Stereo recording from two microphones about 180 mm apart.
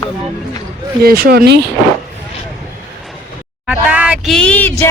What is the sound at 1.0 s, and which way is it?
Speech, 55° right (ahead or behind).